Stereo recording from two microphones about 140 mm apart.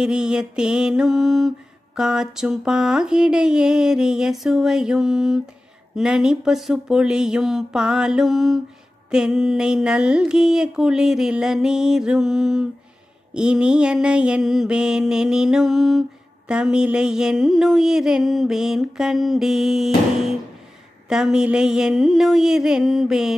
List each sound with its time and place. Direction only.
0.0 s mantra: 5° right (ahead or behind)